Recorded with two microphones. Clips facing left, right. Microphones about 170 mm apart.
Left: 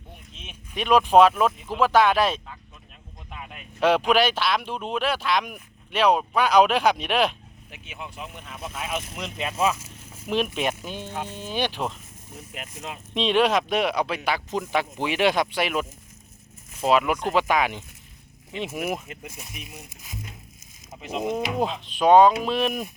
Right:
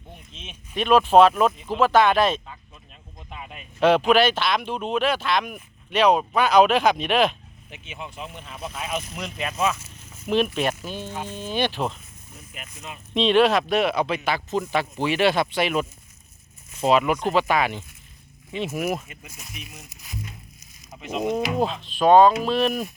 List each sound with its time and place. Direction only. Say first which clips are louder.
0.3 s speech: right 3 dB; 10° left (ahead or behind)
9.1 s speech: right 1 dB; 20° left (ahead or behind)
9.5 s vehicle: left 1 dB; 10° left (ahead or behind)
10.2 s speech: right 3 dB; 10° left (ahead or behind)
13.1 s speech: right 3 dB; 10° left (ahead or behind)
21.1 s speech: right 2 dB; centre (ahead or behind)
21.6 s speech: even; 15° left (ahead or behind)